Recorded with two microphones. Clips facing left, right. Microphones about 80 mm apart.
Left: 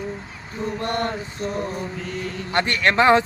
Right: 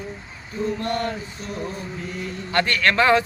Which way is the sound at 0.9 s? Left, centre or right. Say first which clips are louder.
Left 1 dB; left.